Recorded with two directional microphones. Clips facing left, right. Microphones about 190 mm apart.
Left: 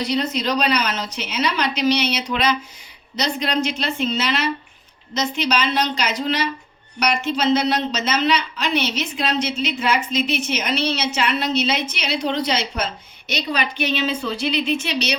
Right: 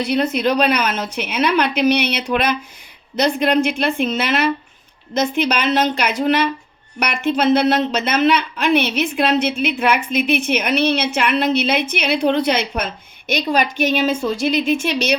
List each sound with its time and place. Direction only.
0.0 s a woman's voice: 55° right (ahead or behind)